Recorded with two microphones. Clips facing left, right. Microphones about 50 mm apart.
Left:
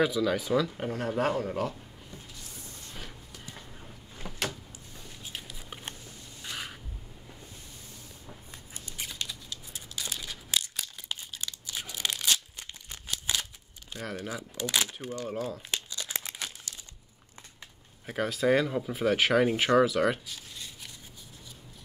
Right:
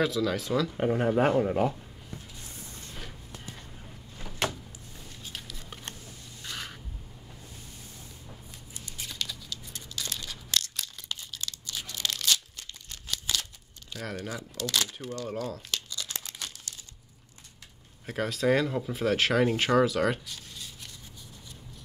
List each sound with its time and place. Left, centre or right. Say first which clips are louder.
0.0 s speech: left 1 dB; centre
0.7 s speech: right 5 dB; centre
5.2 s a sound: even; centre
8.7 s a sound: left 1 dB; left
9.0 s patter: right 1 dB; centre
9.7 s a sound: even; centre
14.6 s speech: even; centre
15.7 s crumpling: left 1 dB; left
18.0 s speech: even; centre